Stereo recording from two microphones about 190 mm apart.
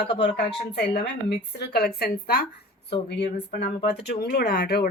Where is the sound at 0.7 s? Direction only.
60° left (ahead or behind).